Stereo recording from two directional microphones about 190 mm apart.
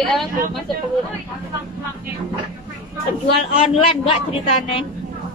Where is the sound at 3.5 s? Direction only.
30° left (ahead or behind).